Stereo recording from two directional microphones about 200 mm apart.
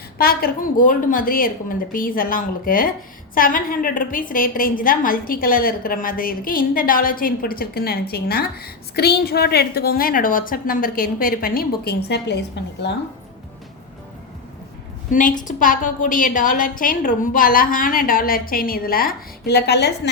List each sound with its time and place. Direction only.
0.2 s a woman's voice: 50° left (ahead or behind)
15.1 s a woman's voice: 40° left (ahead or behind)